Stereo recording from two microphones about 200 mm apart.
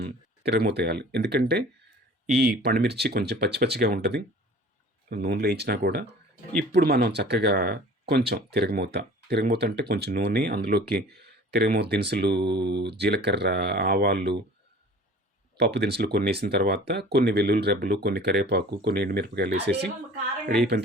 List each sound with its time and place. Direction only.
0.0 s speech: 50° right (ahead or behind)
15.5 s speech: 55° right (ahead or behind)